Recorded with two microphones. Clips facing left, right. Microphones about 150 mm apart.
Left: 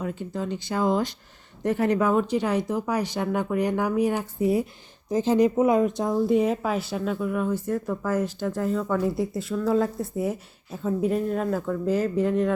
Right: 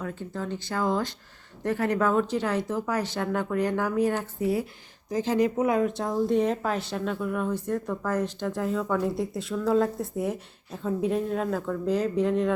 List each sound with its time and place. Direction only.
0.0 s speech: 15° left (ahead or behind)